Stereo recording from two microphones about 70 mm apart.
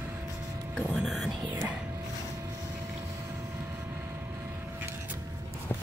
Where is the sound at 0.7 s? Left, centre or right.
Centre.